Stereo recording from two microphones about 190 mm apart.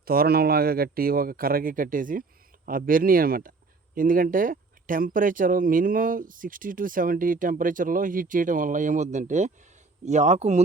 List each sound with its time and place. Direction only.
0.0 s speech: 50° right (ahead or behind)